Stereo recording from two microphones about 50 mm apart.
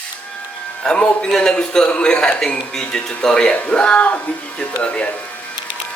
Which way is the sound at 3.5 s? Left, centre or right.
Left.